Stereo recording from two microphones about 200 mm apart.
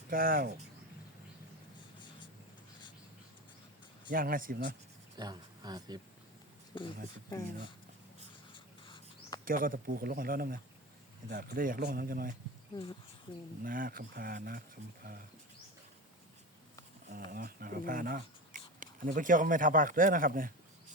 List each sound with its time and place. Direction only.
0.1 s speech: 45° right (ahead or behind)
2.0 s a sound: 25° left (ahead or behind)
4.1 s speech: 45° right (ahead or behind)
5.1 s speech: 20° right (ahead or behind)
6.7 s speech: 25° left (ahead or behind)
8.5 s insect: 25° left (ahead or behind)
9.4 s speech: 45° right (ahead or behind)
12.7 s speech: 20° left (ahead or behind)
13.7 s speech: 45° right (ahead or behind)
17.1 s speech: 50° right (ahead or behind)